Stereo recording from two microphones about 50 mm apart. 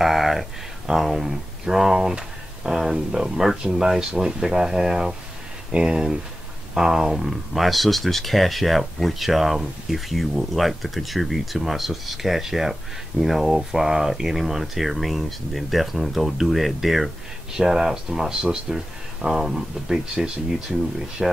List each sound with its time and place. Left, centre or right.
0.0 s speech: centre